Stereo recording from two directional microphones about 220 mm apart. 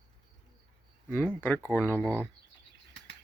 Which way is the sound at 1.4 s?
10° left (ahead or behind).